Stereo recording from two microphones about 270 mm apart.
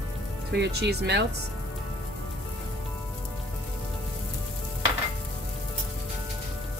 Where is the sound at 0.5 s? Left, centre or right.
Right.